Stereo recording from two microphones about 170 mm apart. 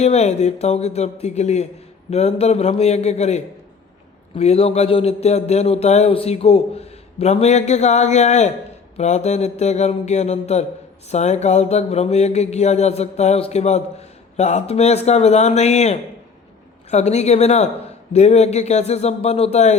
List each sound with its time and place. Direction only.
0.0 s speech: 40° left (ahead or behind)